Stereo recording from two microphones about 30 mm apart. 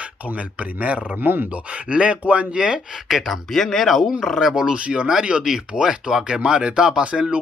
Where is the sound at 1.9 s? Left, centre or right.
Right.